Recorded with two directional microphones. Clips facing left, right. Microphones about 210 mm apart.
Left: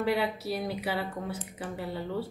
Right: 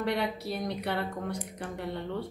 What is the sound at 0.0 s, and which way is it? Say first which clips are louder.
A woman's voice: left 2 dB; 5° left (ahead or behind).